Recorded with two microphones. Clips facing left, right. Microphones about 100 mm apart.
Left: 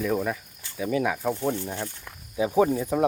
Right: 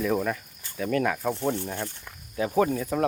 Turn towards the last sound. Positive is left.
turn(degrees=15)  # may be behind; listen again after turning